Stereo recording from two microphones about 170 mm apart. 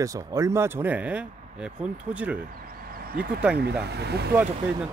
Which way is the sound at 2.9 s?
60° right (ahead or behind).